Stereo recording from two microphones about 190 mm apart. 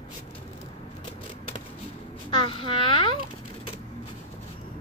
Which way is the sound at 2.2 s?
25° left (ahead or behind).